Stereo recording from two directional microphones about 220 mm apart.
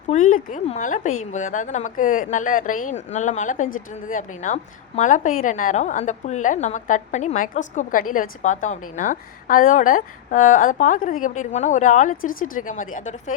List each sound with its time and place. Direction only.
0.1 s speech: 35° left (ahead or behind)